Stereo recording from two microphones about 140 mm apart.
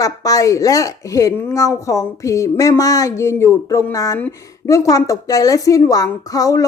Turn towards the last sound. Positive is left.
turn(degrees=25)  # may be behind; listen again after turning